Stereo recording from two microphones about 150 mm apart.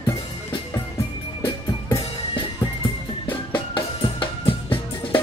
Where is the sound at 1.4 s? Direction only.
30° left (ahead or behind).